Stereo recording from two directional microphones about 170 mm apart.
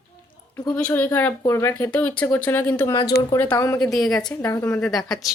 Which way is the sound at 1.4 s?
20° left (ahead or behind).